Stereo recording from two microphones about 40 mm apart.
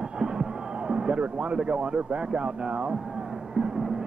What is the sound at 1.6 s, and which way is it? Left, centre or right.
Speech, right.